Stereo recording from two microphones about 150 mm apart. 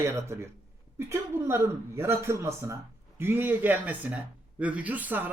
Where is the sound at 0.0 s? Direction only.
20° right (ahead or behind).